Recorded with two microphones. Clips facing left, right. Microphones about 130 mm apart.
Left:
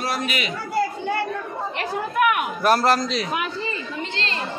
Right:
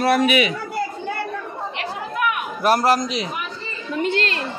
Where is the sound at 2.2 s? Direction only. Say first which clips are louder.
Left 4 dB; 50° left (ahead or behind).